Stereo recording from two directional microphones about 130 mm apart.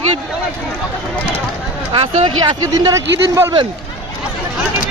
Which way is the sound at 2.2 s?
35° right (ahead or behind).